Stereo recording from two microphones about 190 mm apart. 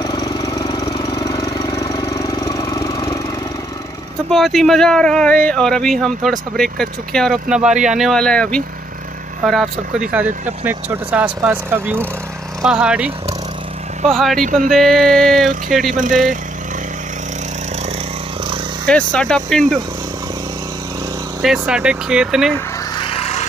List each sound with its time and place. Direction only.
0.0 s engine: 20° left (ahead or behind)
4.3 s speech: centre (ahead or behind)
14.4 s speech: 45° right (ahead or behind)
14.7 s speech: centre (ahead or behind)
18.9 s speech: 5° left (ahead or behind)
21.4 s speech: 5° right (ahead or behind)
22.9 s a sound: 30° left (ahead or behind)